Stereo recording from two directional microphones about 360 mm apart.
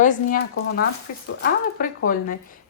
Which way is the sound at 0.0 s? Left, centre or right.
Left.